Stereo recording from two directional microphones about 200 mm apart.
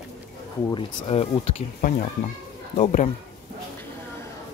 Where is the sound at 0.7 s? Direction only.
25° left (ahead or behind).